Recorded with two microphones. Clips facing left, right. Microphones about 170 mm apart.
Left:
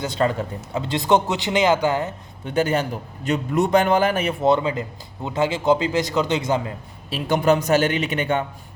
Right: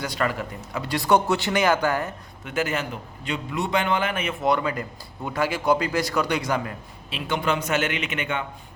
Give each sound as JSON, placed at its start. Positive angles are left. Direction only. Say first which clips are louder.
{"t": 0.0, "sound": "a man's voice", "louder": "left 4 dB", "side_deg": 25}
{"t": 7.1, "sound": "a man's voice", "louder": "left 7 dB", "side_deg": 40}